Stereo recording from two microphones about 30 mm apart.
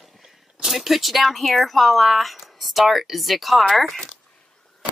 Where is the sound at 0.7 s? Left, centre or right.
Centre.